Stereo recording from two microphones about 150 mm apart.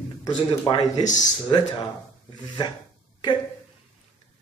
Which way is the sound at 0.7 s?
25° left (ahead or behind).